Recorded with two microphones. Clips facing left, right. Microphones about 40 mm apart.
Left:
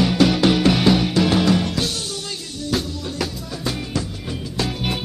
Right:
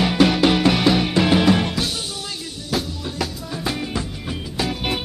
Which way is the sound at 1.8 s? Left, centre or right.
Centre.